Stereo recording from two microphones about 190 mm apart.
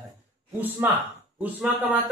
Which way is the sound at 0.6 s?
10° right (ahead or behind).